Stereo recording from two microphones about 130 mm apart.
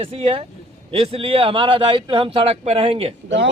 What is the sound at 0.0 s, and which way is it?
A man's voice, 45° right (ahead or behind).